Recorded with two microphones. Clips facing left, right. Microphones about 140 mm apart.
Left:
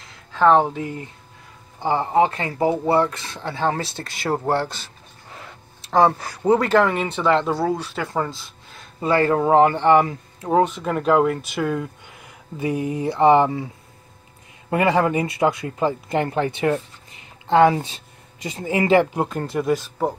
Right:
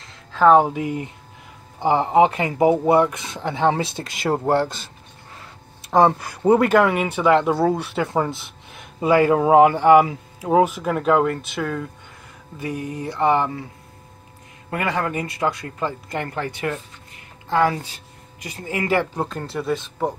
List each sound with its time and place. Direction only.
0.0 s a sound: centre (ahead or behind)
0.4 s speech: 10° right (ahead or behind)
5.9 s speech: 20° right (ahead or behind)
6.4 s speech: 10° right (ahead or behind)
7.8 s speech: 20° right (ahead or behind); by 11.9 s 5° left (ahead or behind)
12.5 s a sound: 20° left (ahead or behind)
14.7 s speech: 25° left (ahead or behind)
19.8 s speech: 5° left (ahead or behind)